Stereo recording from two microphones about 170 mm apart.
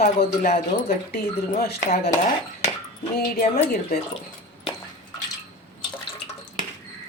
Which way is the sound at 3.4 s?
65° left (ahead or behind).